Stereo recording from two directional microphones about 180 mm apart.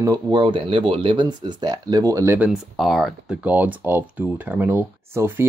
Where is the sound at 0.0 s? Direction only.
20° right (ahead or behind).